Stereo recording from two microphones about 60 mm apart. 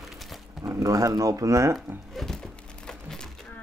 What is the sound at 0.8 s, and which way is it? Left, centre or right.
Speech, right.